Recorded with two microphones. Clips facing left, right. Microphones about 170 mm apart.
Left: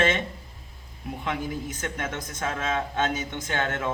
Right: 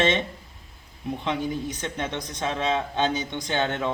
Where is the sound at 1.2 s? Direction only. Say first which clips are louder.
Right 2 dB; 25° right (ahead or behind).